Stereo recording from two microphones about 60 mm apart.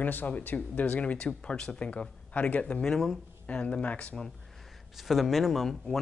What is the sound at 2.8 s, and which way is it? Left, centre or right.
Speech, centre.